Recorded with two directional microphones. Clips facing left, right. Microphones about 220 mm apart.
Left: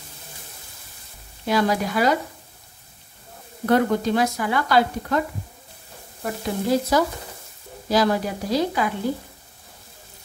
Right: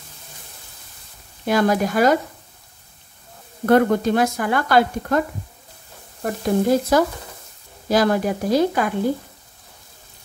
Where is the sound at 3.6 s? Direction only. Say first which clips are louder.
Right 4 dB; 50° right (ahead or behind).